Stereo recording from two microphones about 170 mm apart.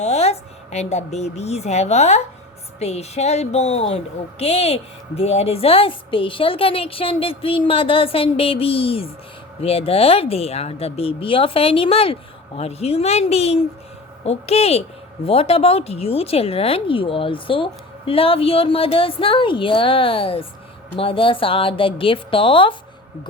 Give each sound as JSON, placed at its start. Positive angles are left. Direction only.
{"t": 0.0, "sound": "speech", "side_deg": 40}